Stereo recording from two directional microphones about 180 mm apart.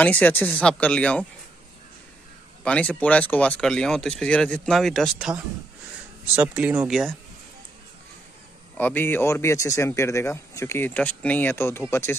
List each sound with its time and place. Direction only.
0.0 s speech: 10° left (ahead or behind)
2.6 s speech: 5° left (ahead or behind)
8.7 s speech: 10° left (ahead or behind)